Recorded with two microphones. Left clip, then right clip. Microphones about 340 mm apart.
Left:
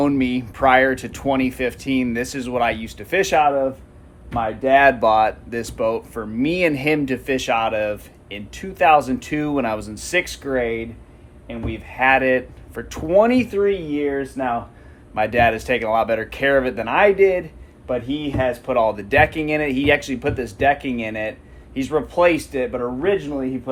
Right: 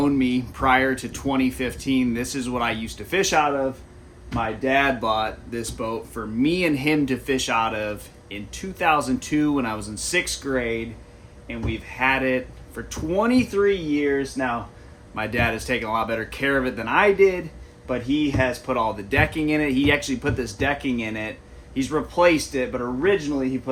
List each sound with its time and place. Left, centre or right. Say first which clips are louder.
0.0 s speech: left 2 dB; centre